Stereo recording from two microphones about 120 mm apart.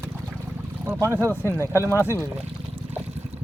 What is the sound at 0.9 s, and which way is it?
Speech, 20° right (ahead or behind).